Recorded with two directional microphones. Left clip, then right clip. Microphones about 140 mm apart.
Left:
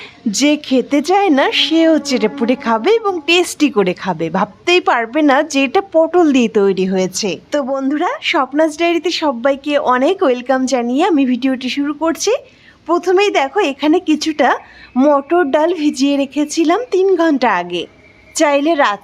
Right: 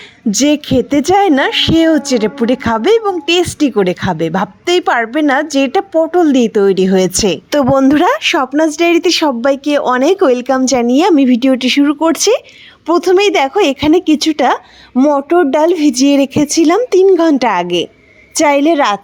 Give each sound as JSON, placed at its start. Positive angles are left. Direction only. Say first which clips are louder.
{"t": 0.3, "sound": "a woman's voice", "louder": "right 2 dB", "side_deg": -15}
{"t": 6.7, "sound": "a woman's voice", "louder": "right 5 dB", "side_deg": -25}
{"t": 7.5, "sound": "speech", "louder": "right 8 dB", "side_deg": -60}
{"t": 8.5, "sound": "a woman's voice", "louder": "right 3 dB", "side_deg": -30}
{"t": 9.4, "sound": "a woman's voice", "louder": "right 2 dB", "side_deg": -30}
{"t": 11.6, "sound": "speech", "louder": "right 6 dB", "side_deg": -55}
{"t": 12.9, "sound": "a woman's voice", "louder": "right 3 dB", "side_deg": -35}
{"t": 15.9, "sound": "a woman's voice", "louder": "right 5 dB", "side_deg": -45}